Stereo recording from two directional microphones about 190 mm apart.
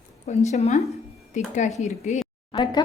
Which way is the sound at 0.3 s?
35° left (ahead or behind).